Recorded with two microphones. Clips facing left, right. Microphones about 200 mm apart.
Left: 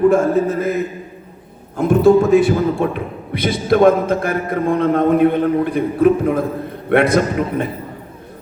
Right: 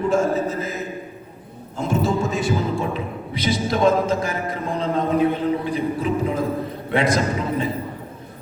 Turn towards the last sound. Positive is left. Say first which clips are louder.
# left 5 dB
turn(degrees=55)  # may be behind; listen again after turning